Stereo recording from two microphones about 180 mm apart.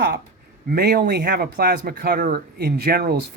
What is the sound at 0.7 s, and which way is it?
Speech, 60° right (ahead or behind).